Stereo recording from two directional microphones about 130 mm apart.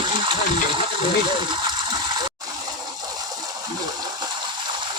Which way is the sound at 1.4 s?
35° right (ahead or behind).